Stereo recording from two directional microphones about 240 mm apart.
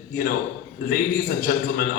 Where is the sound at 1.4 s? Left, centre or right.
Left.